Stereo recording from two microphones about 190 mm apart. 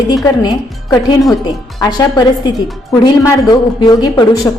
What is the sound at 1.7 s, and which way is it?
A woman's voice, 20° left (ahead or behind).